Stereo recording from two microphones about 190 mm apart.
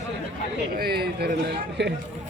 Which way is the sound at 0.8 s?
55° right (ahead or behind).